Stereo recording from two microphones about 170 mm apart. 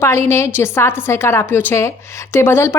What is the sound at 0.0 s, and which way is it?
A woman's voice, 15° left (ahead or behind).